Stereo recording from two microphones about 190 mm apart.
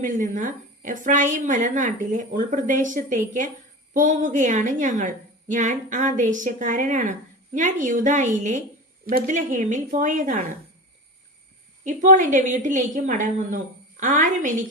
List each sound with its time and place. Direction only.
0.0 s a woman's voice: 40° right (ahead or behind)
11.9 s a woman's voice: 45° right (ahead or behind)